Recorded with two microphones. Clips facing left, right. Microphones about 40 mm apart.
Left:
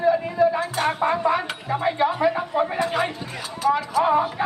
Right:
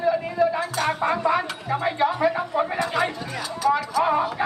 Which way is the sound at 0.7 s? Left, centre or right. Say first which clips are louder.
Left 1 dB; left.